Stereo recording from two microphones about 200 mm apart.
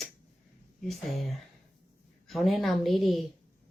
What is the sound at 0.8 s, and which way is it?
Speech, centre (ahead or behind).